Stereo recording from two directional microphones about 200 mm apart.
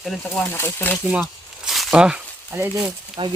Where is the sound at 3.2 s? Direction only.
25° right (ahead or behind).